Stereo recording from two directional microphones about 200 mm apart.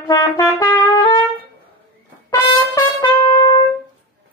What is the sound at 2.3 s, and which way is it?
Trumpet, 20° left (ahead or behind).